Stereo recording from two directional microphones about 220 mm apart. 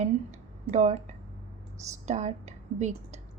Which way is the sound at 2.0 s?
30° right (ahead or behind).